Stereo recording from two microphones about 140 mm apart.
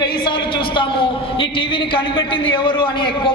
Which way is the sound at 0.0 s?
35° left (ahead or behind).